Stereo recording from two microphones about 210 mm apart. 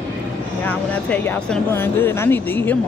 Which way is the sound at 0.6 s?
5° left (ahead or behind).